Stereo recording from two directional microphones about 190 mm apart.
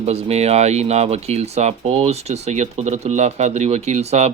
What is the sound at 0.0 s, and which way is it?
Speech, 35° right (ahead or behind).